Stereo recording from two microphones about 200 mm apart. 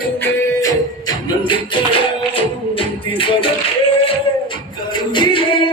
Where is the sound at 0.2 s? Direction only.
10° left (ahead or behind).